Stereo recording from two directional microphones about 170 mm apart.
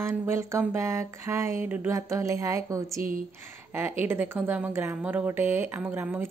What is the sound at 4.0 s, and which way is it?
A woman's voice, 10° right (ahead or behind).